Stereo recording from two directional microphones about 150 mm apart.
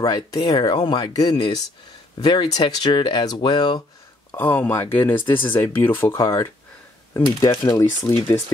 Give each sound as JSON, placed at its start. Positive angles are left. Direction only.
{"t": 0.0, "sound": "speech", "side_deg": 25}
{"t": 4.3, "sound": "speech", "side_deg": 15}